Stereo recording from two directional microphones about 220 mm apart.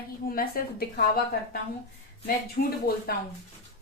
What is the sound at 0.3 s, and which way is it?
Speech, 40° left (ahead or behind).